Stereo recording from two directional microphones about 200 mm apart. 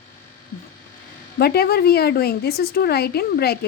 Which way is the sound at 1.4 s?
50° left (ahead or behind).